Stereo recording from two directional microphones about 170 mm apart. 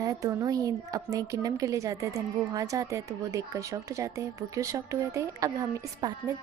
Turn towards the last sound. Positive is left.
turn(degrees=-20)  # may be behind; listen again after turning